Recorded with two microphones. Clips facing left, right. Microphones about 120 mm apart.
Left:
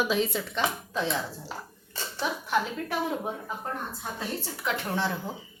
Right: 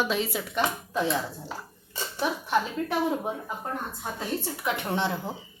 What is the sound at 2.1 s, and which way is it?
Speech, 20° right (ahead or behind).